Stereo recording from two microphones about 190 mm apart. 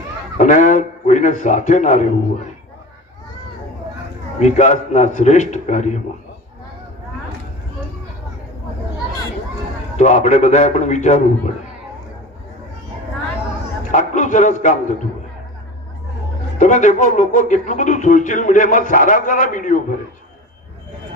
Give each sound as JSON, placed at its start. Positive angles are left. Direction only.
{"t": 0.3, "sound": "a man's voice", "side_deg": 40}
{"t": 4.4, "sound": "a man's voice", "side_deg": 40}
{"t": 10.0, "sound": "a man's voice", "side_deg": 40}
{"t": 13.9, "sound": "a man's voice", "side_deg": 40}
{"t": 16.6, "sound": "speech", "side_deg": 40}